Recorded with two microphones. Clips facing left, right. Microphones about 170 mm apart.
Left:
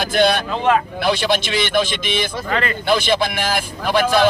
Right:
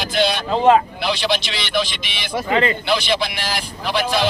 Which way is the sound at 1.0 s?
50° left (ahead or behind).